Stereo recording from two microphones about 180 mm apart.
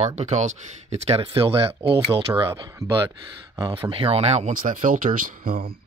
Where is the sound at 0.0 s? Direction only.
40° right (ahead or behind).